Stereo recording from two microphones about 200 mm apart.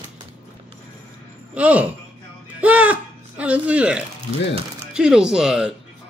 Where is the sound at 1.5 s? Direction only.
5° right (ahead or behind).